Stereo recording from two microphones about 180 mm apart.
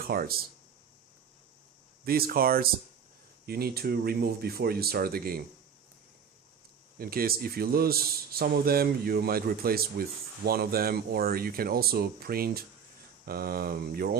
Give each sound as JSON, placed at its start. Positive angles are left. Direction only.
{"t": 0.0, "sound": "speech", "side_deg": -55}
{"t": 2.0, "sound": "speech", "side_deg": -55}
{"t": 7.0, "sound": "speech", "side_deg": -55}